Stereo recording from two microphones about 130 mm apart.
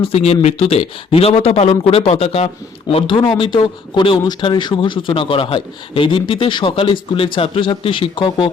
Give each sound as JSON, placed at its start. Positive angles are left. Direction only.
{"t": 0.0, "sound": "speech", "side_deg": 50}
{"t": 2.9, "sound": "speech", "side_deg": 40}